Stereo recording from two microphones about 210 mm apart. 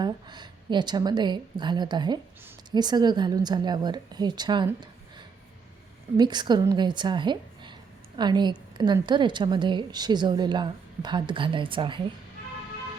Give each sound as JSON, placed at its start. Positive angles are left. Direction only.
{"t": 0.0, "sound": "a woman's voice", "side_deg": -20}